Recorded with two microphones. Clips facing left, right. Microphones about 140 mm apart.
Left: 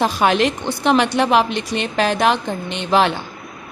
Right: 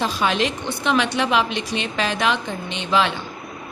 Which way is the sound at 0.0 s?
55° left (ahead or behind).